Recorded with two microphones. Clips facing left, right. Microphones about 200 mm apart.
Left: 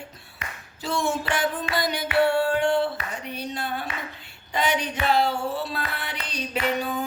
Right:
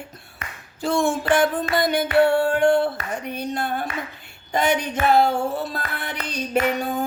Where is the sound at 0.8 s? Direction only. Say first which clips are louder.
Right 6 dB; 50° right (ahead or behind).